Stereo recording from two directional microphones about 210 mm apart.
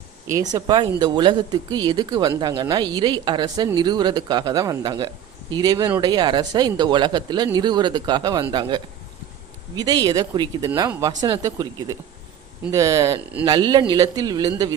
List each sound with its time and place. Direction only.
0.3 s a woman's voice: 15° right (ahead or behind)